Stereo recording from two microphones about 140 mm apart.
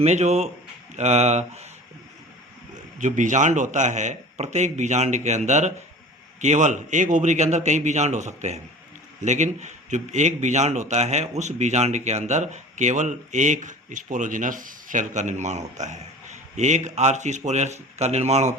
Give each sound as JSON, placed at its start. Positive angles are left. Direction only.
{"t": 0.0, "sound": "speech", "side_deg": -50}
{"t": 3.0, "sound": "speech", "side_deg": -60}